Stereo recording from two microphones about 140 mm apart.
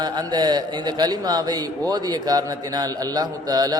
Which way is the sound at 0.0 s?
30° right (ahead or behind).